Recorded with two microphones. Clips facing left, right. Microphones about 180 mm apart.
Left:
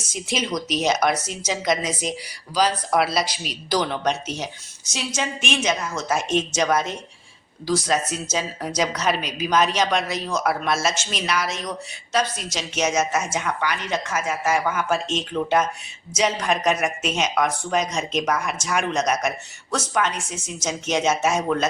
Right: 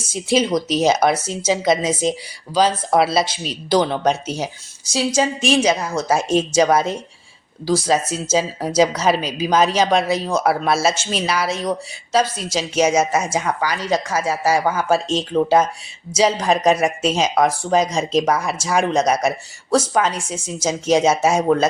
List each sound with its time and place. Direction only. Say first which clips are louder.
0.0 s speech: right 9 dB; 30° right (ahead or behind)